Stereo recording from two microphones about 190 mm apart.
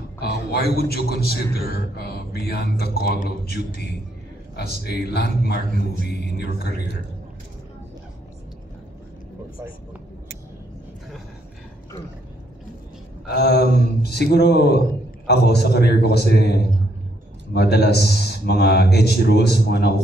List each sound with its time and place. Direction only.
0.2 s a sound: 55° left (ahead or behind)
0.7 s a man's voice: 55° left (ahead or behind)
5.7 s speech: 45° right (ahead or behind)
6.3 s a man's voice: 55° left (ahead or behind)
13.3 s a man's voice: 55° left (ahead or behind)